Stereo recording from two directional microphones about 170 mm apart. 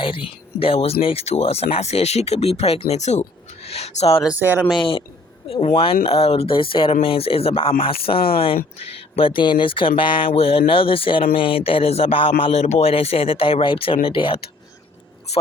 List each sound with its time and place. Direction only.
0.0 s speech: 30° left (ahead or behind)
4.2 s speech: 10° right (ahead or behind)
4.7 s speech: 30° left (ahead or behind)
9.1 s speech: 30° left (ahead or behind)